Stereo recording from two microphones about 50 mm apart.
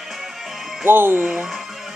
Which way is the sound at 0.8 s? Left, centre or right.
Right.